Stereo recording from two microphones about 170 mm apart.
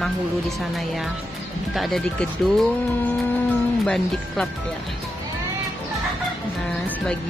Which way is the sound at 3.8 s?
5° left (ahead or behind).